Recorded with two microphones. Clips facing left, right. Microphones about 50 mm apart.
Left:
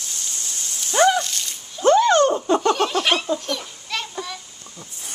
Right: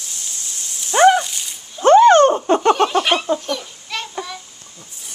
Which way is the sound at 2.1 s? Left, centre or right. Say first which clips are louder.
Right 5 dB; right.